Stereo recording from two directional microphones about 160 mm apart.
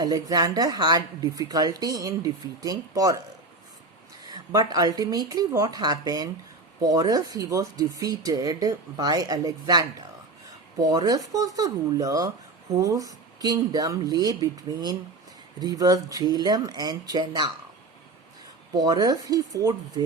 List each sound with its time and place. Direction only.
0.0 s a woman's voice: 25° right (ahead or behind)
4.3 s a woman's voice: 25° right (ahead or behind)
18.7 s a woman's voice: 25° right (ahead or behind)